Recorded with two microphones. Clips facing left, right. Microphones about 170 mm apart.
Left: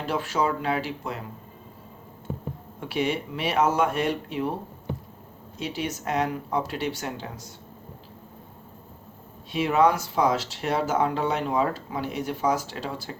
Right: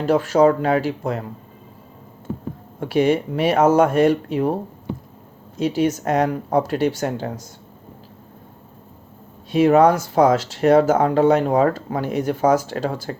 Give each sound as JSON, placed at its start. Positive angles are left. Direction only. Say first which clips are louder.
{"t": 0.0, "sound": "speech", "louder": "right 11 dB", "side_deg": -45}
{"t": 2.8, "sound": "speech", "louder": "right 9 dB", "side_deg": -45}
{"t": 5.5, "sound": "speech", "louder": "right 11 dB", "side_deg": -45}
{"t": 9.5, "sound": "speech", "louder": "right 8 dB", "side_deg": -45}